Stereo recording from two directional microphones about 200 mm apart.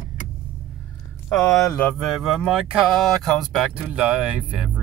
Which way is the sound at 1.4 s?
15° left (ahead or behind).